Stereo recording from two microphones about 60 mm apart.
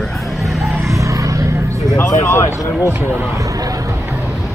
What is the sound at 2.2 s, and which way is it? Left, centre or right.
Speech, left.